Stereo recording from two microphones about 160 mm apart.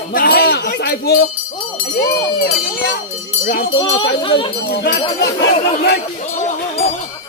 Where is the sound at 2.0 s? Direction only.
70° left (ahead or behind).